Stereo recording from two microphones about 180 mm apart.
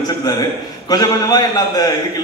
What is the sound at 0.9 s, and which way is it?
A man's voice, 20° left (ahead or behind).